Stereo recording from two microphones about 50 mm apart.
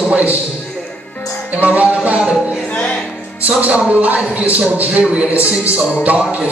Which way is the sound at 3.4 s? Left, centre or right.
Right.